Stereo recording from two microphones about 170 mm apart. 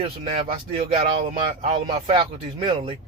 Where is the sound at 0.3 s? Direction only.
35° right (ahead or behind).